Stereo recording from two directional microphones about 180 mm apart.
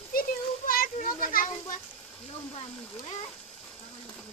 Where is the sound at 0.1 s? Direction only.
55° left (ahead or behind).